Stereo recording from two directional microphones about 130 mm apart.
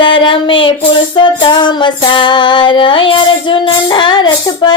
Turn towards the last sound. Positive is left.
turn(degrees=35)  # may be behind; listen again after turning